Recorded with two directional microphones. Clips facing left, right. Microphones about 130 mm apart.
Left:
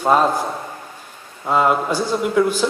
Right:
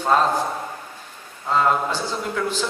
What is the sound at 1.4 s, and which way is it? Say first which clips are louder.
A man's voice: left 3 dB; 15° left (ahead or behind).